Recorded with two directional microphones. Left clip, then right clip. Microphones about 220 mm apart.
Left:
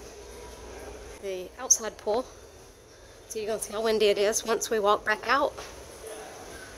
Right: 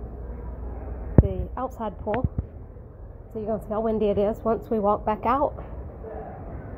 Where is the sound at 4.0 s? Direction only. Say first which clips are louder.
Left 1 dB; 30° left (ahead or behind).